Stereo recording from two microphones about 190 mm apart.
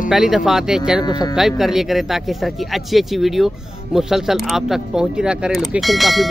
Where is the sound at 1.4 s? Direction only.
Centre (ahead or behind).